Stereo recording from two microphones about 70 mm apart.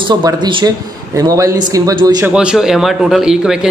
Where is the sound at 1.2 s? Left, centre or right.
Right.